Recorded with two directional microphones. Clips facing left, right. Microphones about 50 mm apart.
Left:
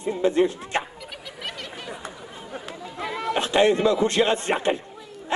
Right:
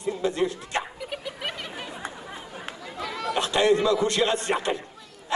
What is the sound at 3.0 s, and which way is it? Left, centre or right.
A man's voice, left.